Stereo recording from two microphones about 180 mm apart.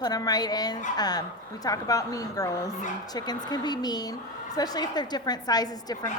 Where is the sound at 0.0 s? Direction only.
20° left (ahead or behind).